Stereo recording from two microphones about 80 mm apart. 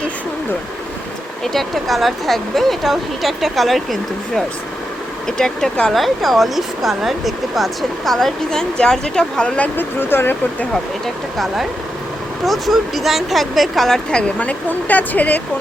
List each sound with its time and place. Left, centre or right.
1.5 s speech: centre
5.4 s speech: centre
9.7 s speech: left
11.0 s speech: centre; by 15.4 s left